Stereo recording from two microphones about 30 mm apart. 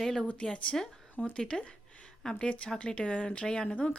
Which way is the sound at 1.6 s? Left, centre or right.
Left.